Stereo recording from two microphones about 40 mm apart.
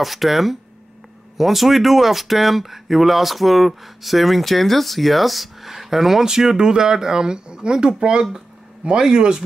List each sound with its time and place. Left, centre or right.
0.0 s speech: centre